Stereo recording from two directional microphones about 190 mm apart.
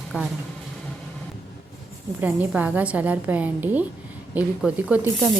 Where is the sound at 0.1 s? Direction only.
10° right (ahead or behind).